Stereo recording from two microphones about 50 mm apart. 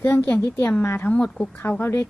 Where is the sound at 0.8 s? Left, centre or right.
Left.